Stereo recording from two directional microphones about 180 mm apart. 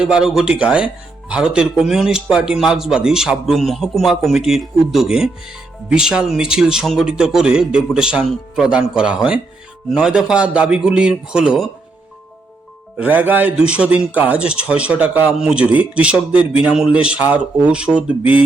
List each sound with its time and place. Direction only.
0.0 s speech: 5° right (ahead or behind)
13.0 s speech: 10° right (ahead or behind)